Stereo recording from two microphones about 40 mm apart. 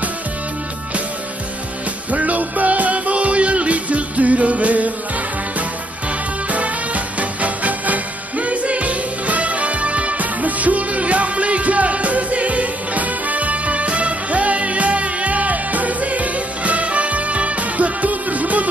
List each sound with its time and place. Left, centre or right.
2.0 s music: right
6.5 s music: right